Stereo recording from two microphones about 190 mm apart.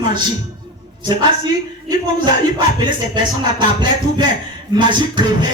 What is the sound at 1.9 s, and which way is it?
Speech, 25° right (ahead or behind).